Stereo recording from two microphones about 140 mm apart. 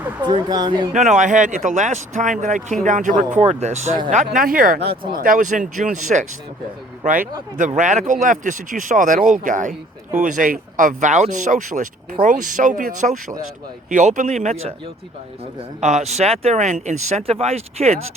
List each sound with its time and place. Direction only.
0.2 s speech: 35° right (ahead or behind)
1.1 s speech: 65° right (ahead or behind)
3.4 s speech: 55° right (ahead or behind)
4.1 s speech: 70° right (ahead or behind)
7.0 s speech: 75° right (ahead or behind)
7.8 s speech: 60° right (ahead or behind)
15.8 s speech: 55° right (ahead or behind)